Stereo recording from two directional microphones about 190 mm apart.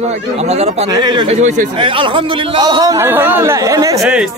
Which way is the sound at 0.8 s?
20° right (ahead or behind).